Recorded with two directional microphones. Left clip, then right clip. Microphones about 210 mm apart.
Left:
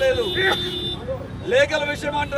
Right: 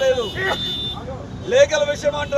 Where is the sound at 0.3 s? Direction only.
50° left (ahead or behind).